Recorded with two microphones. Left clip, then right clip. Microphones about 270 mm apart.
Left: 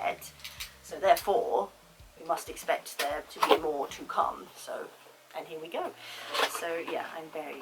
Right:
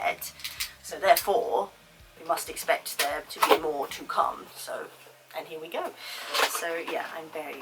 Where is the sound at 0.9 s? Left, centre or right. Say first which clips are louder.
Right 3 dB; centre.